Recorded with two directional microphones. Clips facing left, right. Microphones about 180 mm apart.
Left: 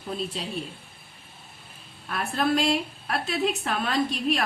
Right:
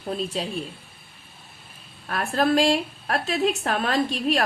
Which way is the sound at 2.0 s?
40° right (ahead or behind).